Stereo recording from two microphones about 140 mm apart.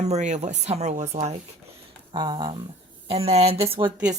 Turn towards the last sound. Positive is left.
turn(degrees=-45)  # may be behind; listen again after turning